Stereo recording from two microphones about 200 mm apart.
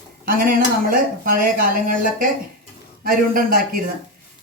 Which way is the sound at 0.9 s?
45° right (ahead or behind).